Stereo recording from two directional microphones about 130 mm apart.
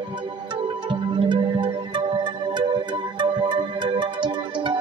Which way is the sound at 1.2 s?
35° right (ahead or behind).